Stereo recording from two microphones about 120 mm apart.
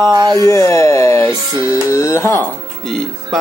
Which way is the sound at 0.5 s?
25° left (ahead or behind).